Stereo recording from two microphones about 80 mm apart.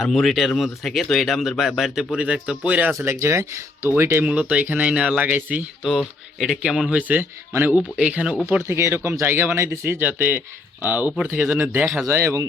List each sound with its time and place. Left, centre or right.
0.0 s speech: centre
3.0 s speech: right
4.2 s speech: centre
5.8 s speech: centre
7.1 s speech: right
7.8 s speech: centre
8.4 s speech: right
12.0 s speech: right